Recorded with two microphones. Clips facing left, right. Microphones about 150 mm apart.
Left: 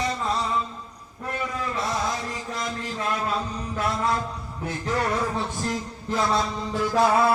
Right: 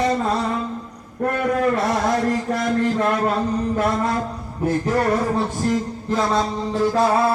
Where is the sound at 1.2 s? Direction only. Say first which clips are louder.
Right 11 dB; 60° right (ahead or behind).